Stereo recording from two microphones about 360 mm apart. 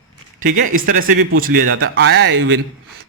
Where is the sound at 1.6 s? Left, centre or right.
Right.